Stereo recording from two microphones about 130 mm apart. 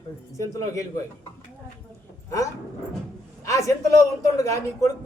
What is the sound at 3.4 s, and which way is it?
A man's voice, 25° left (ahead or behind).